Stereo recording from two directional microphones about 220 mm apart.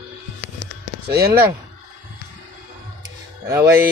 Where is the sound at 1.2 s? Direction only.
10° right (ahead or behind).